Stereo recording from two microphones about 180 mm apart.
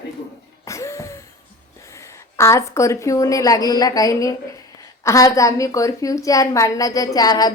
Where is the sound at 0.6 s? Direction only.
15° left (ahead or behind).